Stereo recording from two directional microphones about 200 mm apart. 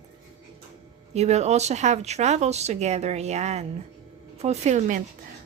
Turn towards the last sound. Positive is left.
turn(degrees=-35)  # may be behind; listen again after turning